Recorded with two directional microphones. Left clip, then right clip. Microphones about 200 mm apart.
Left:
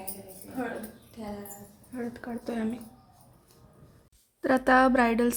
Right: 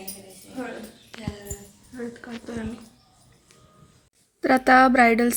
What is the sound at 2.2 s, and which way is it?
Speech, 30° left (ahead or behind).